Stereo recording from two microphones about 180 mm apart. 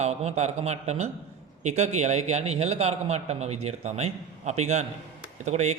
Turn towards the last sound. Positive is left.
turn(degrees=-40)  # may be behind; listen again after turning